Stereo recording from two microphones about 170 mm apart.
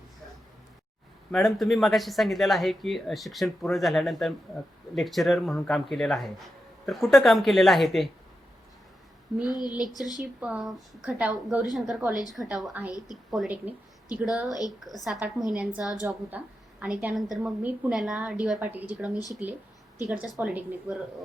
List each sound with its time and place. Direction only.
1.3 s speech: centre (ahead or behind)
9.5 s speech: 25° left (ahead or behind)
10.2 s a woman's voice: 5° right (ahead or behind)